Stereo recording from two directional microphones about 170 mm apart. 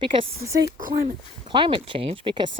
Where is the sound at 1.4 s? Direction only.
30° right (ahead or behind).